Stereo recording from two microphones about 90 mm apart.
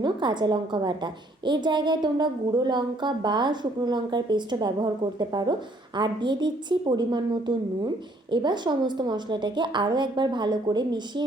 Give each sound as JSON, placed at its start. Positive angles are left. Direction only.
{"t": 0.0, "sound": "a woman's voice", "side_deg": -55}